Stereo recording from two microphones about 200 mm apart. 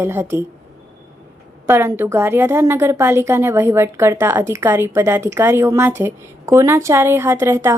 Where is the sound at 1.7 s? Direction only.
10° right (ahead or behind).